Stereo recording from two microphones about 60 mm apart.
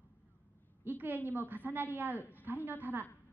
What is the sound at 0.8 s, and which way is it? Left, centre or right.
A woman's voice, right.